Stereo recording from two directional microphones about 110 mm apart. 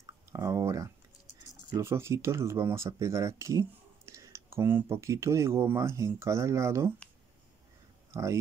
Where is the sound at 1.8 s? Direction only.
25° right (ahead or behind).